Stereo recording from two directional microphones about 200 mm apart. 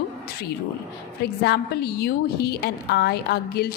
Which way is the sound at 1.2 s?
55° left (ahead or behind).